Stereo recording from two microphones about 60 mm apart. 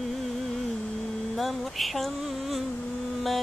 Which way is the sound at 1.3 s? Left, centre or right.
Centre.